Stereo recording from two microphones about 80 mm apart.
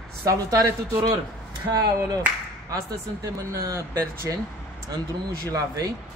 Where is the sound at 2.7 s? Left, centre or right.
Right.